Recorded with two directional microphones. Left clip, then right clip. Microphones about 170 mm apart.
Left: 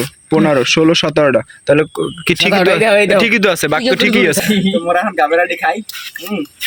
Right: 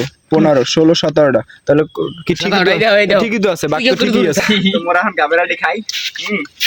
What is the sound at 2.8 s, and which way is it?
Speech, 55° left (ahead or behind).